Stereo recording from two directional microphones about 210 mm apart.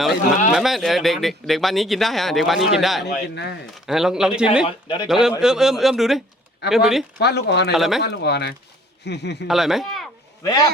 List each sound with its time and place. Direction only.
0.5 s speech: centre (ahead or behind)
4.6 s speech: 25° left (ahead or behind)
5.0 s speech: centre (ahead or behind)
7.2 s speech: 50° left (ahead or behind)
7.7 s speech: centre (ahead or behind)
8.0 s speech: 50° left (ahead or behind)
9.5 s speech: centre (ahead or behind)
10.4 s a man's voice: 15° left (ahead or behind)